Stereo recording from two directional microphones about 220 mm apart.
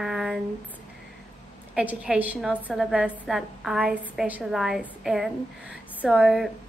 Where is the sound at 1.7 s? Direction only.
5° right (ahead or behind).